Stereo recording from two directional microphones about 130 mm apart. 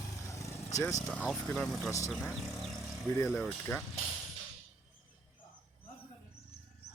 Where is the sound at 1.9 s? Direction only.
25° left (ahead or behind).